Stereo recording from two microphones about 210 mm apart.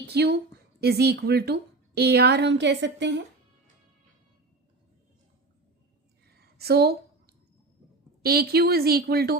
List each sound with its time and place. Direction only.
0.1 s a woman's voice: 50° right (ahead or behind)
6.2 s a sound: 50° right (ahead or behind)
8.2 s a woman's voice: 45° right (ahead or behind)